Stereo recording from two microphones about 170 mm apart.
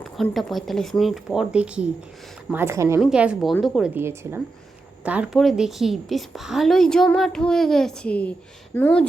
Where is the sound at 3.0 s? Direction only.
5° right (ahead or behind).